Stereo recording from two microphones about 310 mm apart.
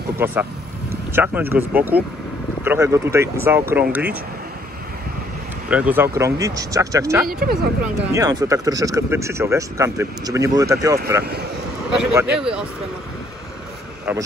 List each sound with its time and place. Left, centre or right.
0.2 s speech: centre
5.7 s speech: centre
7.2 s speech: right
8.1 s speech: centre